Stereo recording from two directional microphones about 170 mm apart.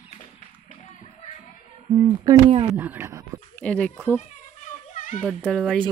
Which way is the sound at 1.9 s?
20° right (ahead or behind).